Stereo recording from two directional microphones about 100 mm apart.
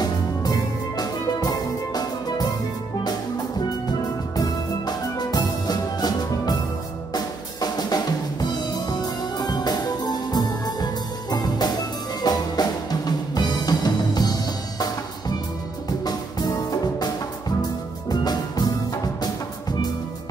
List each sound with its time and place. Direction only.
0.0 s music: 40° left (ahead or behind)
4.4 s music: 40° left (ahead or behind)
7.2 s drum kit: 40° left (ahead or behind)
12.2 s music: 40° left (ahead or behind)